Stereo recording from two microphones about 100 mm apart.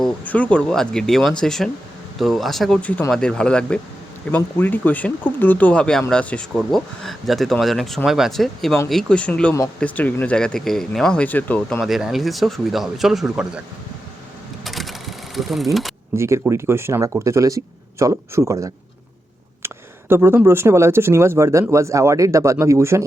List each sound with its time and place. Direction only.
0.3 s speech: 15° left (ahead or behind)
6.5 s speech: centre (ahead or behind); by 11.8 s 15° left (ahead or behind)
11.8 s speech: 5° right (ahead or behind)
14.6 s vehicle: centre (ahead or behind)
16.1 s speech: 25° right (ahead or behind)